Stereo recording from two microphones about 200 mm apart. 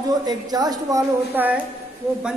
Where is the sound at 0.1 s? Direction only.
20° right (ahead or behind).